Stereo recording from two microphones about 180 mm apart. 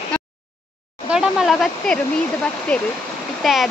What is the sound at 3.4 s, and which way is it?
Speech, centre (ahead or behind).